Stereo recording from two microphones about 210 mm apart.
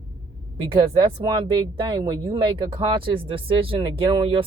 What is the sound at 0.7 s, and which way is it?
Speech, 25° right (ahead or behind).